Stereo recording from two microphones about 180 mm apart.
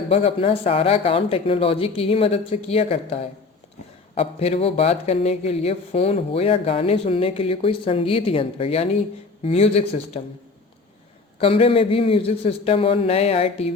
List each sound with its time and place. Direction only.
0.1 s speech: 35° left (ahead or behind)
11.3 s speech: 30° left (ahead or behind)